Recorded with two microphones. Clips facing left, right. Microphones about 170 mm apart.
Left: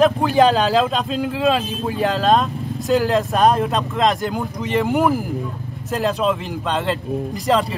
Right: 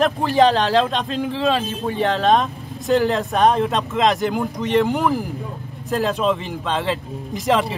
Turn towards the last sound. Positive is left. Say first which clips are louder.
# left 1 dB
turn(degrees=0)  # may be behind; listen again after turning